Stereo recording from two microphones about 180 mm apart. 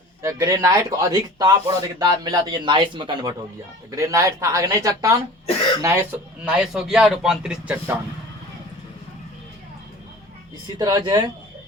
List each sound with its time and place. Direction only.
0.2 s speech: 15° right (ahead or behind)
5.5 s speech: 35° left (ahead or behind)
5.8 s a man's voice: 15° right (ahead or behind)
10.8 s speech: 20° right (ahead or behind)